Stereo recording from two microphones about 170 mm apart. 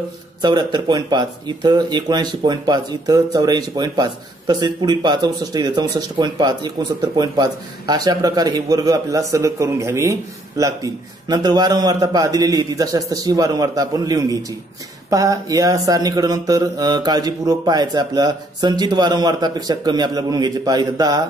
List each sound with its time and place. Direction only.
0.4 s speech: 25° right (ahead or behind)